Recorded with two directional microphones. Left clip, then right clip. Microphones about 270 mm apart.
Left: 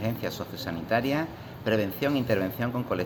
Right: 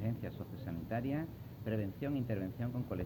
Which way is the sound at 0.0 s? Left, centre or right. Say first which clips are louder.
Left 13 dB; left.